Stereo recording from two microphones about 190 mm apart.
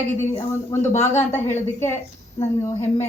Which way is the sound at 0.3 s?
10° left (ahead or behind).